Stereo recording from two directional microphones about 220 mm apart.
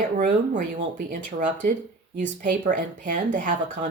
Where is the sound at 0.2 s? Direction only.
35° right (ahead or behind).